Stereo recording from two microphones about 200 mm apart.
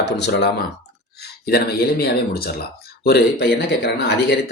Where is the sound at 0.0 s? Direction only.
60° left (ahead or behind).